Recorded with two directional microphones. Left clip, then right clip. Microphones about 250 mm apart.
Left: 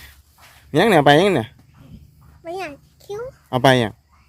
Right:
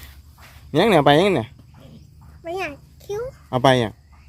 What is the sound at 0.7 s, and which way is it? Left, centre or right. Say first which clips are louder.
Speech: left 2 dB; centre.